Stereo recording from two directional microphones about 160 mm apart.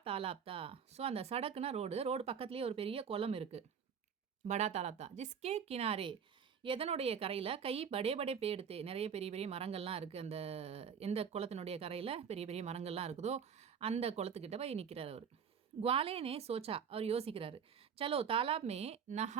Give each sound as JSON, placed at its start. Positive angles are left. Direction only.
{"t": 0.0, "sound": "speech", "side_deg": -35}